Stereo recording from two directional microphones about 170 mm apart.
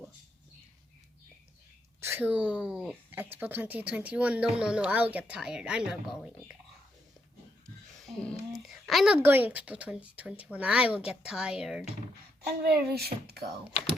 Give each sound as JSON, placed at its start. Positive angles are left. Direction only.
{"t": 2.0, "sound": "speech", "side_deg": -10}
{"t": 8.0, "sound": "speech", "side_deg": 5}
{"t": 12.5, "sound": "speech", "side_deg": -70}